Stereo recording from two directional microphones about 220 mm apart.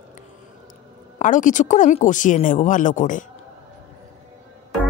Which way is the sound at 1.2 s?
35° left (ahead or behind).